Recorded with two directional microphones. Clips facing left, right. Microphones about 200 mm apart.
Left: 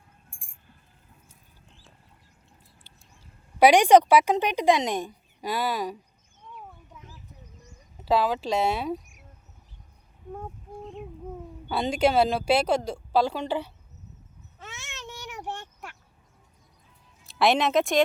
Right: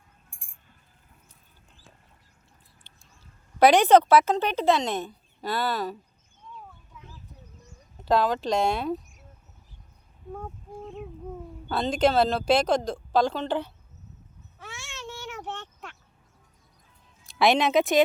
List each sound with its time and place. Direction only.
3.6 s speech: 10° left (ahead or behind)
7.9 s speech: 5° left (ahead or behind)
11.7 s speech: 10° left (ahead or behind)
14.6 s baby cry: 20° left (ahead or behind)
17.2 s speech: centre (ahead or behind)